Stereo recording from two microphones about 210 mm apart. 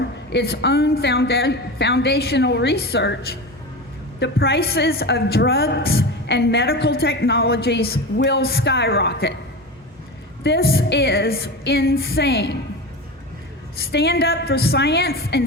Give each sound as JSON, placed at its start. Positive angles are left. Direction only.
{"t": 0.3, "sound": "a woman's voice", "side_deg": 50}
{"t": 10.4, "sound": "a woman's voice", "side_deg": 50}
{"t": 13.7, "sound": "a woman's voice", "side_deg": 50}